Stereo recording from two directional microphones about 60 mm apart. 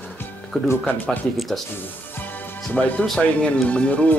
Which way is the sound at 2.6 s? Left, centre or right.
Left.